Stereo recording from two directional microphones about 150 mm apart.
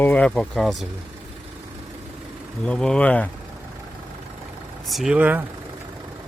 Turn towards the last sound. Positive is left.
turn(degrees=-10)  # may be behind; listen again after turning